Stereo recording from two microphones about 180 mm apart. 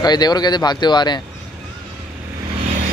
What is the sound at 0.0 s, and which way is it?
Speech, 20° left (ahead or behind).